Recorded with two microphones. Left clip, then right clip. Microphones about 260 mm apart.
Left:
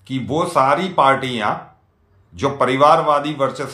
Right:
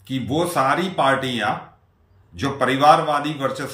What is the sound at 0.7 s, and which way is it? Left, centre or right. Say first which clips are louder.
Speech: left 4 dB; centre.